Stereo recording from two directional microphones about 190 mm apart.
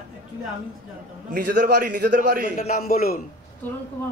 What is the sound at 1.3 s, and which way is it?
A man's voice, 45° right (ahead or behind).